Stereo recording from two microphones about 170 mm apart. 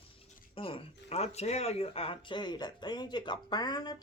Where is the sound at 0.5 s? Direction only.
30° left (ahead or behind).